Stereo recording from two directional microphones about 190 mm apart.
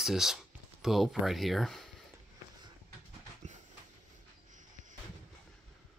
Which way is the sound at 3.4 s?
40° right (ahead or behind).